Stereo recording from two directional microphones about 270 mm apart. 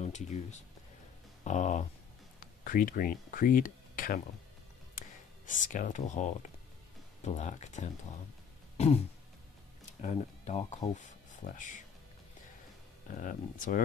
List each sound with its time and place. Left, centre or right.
0.0 s speech: left
5.6 s speech: left
8.7 s throat clearing: left
10.0 s speech: left
13.2 s speech: left